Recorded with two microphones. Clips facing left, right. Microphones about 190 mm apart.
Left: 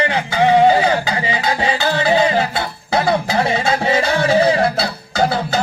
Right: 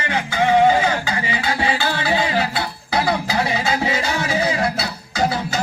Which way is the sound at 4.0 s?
60° left (ahead or behind).